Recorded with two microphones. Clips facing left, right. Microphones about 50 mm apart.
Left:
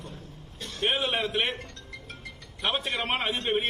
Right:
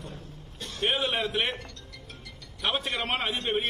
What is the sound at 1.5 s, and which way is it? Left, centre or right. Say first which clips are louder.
Music: left 1 dB; left.